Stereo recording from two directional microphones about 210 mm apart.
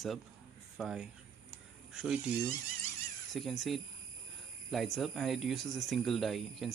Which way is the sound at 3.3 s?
Centre (ahead or behind).